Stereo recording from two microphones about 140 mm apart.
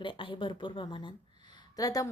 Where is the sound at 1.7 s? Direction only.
25° left (ahead or behind).